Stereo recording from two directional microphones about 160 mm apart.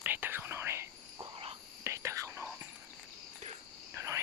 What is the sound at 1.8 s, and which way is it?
Whispering, 15° right (ahead or behind).